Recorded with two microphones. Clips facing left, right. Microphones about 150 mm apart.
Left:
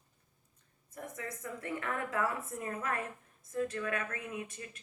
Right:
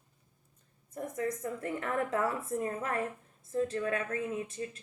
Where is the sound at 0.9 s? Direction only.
30° right (ahead or behind).